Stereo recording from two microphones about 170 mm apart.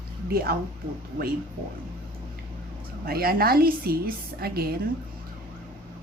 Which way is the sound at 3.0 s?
60° right (ahead or behind).